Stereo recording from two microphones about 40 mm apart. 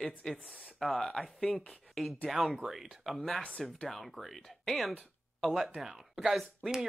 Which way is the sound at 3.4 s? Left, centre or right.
Left.